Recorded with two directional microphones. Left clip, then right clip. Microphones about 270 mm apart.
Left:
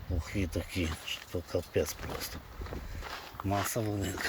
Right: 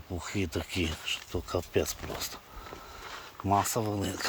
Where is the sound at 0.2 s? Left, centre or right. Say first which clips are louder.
Right 3 dB; centre.